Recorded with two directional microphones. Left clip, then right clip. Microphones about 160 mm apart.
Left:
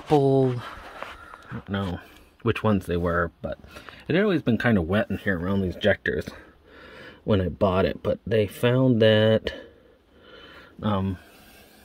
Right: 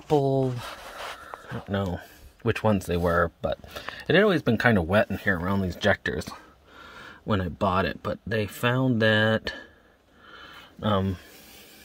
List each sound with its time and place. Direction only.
0.1 s speech: centre (ahead or behind)
1.9 s speech: centre (ahead or behind)
3.3 s speech: 25° right (ahead or behind)
4.0 s speech: 15° right (ahead or behind)
6.1 s speech: centre (ahead or behind)
6.8 s a sound: 15° left (ahead or behind)
7.5 s speech: 15° left (ahead or behind)
10.8 s speech: 10° right (ahead or behind)